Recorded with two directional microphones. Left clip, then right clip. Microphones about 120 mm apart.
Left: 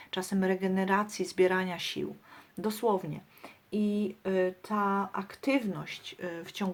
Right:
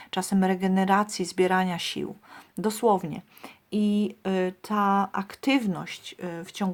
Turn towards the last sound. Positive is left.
turn(degrees=-35)  # may be behind; listen again after turning